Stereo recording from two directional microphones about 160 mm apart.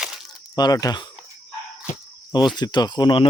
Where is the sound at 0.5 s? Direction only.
25° left (ahead or behind).